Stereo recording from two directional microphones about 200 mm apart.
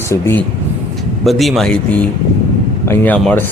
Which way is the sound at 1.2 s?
Centre (ahead or behind).